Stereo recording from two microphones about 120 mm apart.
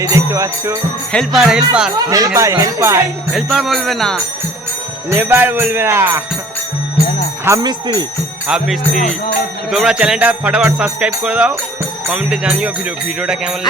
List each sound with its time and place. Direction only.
0.0 s speech: 25° right (ahead or behind)
1.1 s speech: centre (ahead or behind)
2.0 s speech: 30° right (ahead or behind)
3.3 s speech: centre (ahead or behind)
5.0 s music: 15° right (ahead or behind)
7.6 s speech: 35° right (ahead or behind)
8.4 s speech: 5° right (ahead or behind)
9.6 s music: 5° right (ahead or behind)